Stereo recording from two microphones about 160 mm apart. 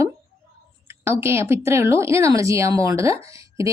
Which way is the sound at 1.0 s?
15° right (ahead or behind).